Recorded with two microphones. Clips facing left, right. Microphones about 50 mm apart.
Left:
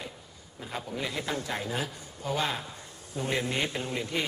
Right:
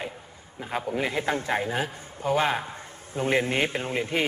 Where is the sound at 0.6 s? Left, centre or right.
Right.